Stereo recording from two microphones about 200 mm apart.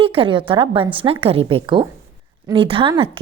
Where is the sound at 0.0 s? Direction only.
25° right (ahead or behind).